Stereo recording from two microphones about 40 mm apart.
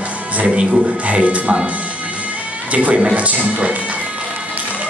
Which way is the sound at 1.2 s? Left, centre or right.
Right.